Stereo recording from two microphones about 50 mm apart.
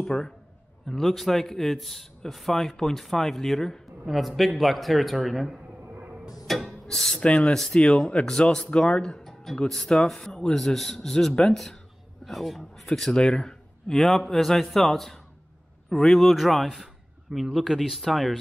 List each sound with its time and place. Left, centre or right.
0.0 s a man's voice: centre
6.6 s a sound: centre
7.2 s speech: centre
7.5 s speech: centre
7.8 s speech: centre
9.2 s music: centre
9.7 s a man's voice: centre